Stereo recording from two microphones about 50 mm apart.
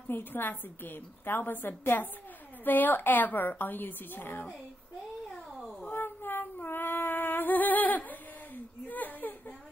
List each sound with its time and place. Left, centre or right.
0.1 s a woman's voice: left
5.9 s music: left
8.8 s whimper: left